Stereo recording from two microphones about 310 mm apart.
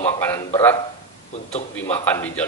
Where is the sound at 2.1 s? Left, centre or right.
Centre.